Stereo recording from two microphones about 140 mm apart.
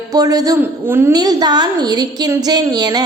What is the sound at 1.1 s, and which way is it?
A woman's voice, 30° right (ahead or behind).